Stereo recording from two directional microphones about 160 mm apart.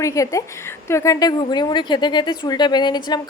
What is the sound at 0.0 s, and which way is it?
A woman's voice, 20° left (ahead or behind).